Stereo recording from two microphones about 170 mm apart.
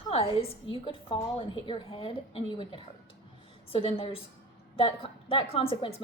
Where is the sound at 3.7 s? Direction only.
35° left (ahead or behind).